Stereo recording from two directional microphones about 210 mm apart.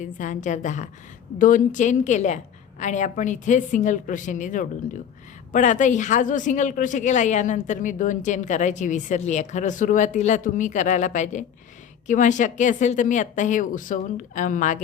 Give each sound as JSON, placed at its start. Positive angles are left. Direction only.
{"t": 0.0, "sound": "a woman's voice", "side_deg": 35}